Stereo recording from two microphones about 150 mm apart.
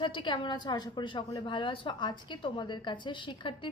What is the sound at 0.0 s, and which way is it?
A woman's voice, 30° left (ahead or behind).